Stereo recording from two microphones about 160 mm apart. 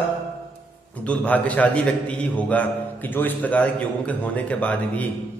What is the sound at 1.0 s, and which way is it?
A man's voice, 10° left (ahead or behind).